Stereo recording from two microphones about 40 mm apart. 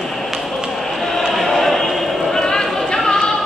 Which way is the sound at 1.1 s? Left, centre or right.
Centre.